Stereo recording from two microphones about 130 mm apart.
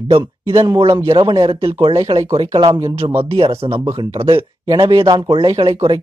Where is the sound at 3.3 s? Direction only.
45° right (ahead or behind); by 5.6 s 25° right (ahead or behind).